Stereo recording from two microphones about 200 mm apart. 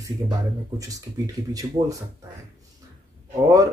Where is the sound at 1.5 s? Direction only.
20° right (ahead or behind).